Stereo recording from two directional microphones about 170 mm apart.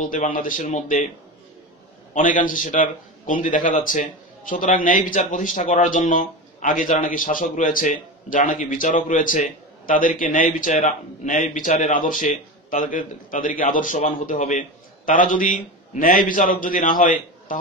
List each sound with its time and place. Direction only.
0.0 s speech: 50° left (ahead or behind)
2.1 s speech: 50° left (ahead or behind)